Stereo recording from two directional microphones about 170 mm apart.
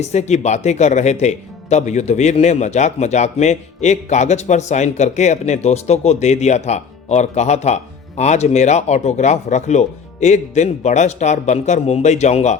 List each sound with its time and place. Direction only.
0.0 s speech: 40° left (ahead or behind)